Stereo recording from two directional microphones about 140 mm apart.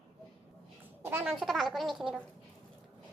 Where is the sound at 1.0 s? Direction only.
15° right (ahead or behind).